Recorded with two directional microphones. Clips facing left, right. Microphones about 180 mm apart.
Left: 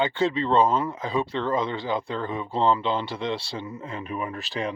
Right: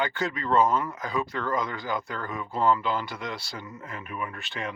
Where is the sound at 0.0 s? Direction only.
30° left (ahead or behind).